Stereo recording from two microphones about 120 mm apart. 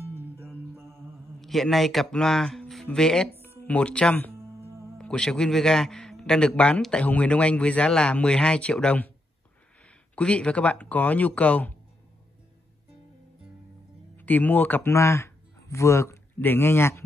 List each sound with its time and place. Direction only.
0.1 s music: 20° right (ahead or behind)
1.4 s speech: centre (ahead or behind)
4.6 s music: 25° right (ahead or behind)
4.9 s a man's voice: 5° left (ahead or behind)
14.1 s speech: 15° left (ahead or behind)